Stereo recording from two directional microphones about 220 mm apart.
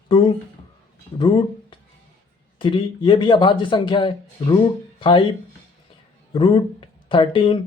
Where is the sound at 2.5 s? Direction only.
20° left (ahead or behind).